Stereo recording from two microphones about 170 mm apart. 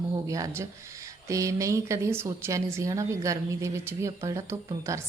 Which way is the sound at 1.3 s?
20° right (ahead or behind).